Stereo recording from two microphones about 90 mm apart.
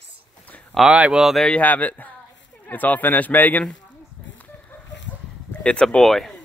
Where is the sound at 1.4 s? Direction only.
15° left (ahead or behind).